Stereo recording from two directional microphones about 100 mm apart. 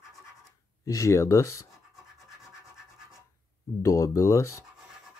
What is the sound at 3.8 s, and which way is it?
Speech, 30° left (ahead or behind).